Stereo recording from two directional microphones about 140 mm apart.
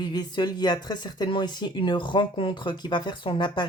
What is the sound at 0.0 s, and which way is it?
Speech, 30° left (ahead or behind).